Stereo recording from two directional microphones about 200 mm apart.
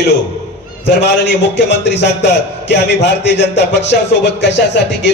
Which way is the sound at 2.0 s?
60° left (ahead or behind).